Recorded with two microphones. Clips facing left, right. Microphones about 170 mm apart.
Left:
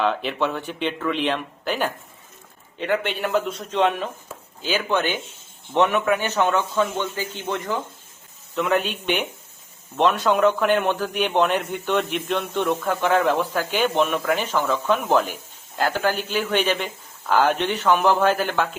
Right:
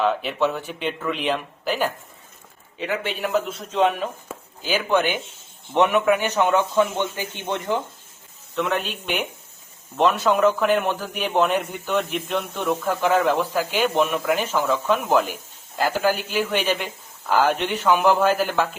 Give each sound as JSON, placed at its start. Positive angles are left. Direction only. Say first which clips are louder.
{"t": 0.0, "sound": "a man's voice", "louder": "right 1 dB", "side_deg": 0}
{"t": 8.5, "sound": "a man's voice", "louder": "left 2 dB", "side_deg": 0}